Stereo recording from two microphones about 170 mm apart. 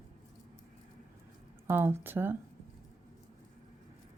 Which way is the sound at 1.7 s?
15° right (ahead or behind).